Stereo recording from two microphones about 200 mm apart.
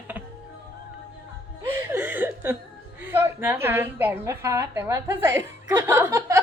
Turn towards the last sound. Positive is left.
turn(degrees=-15)  # may be behind; listen again after turning